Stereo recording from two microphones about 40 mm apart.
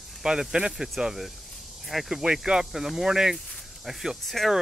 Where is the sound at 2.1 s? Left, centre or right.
Centre.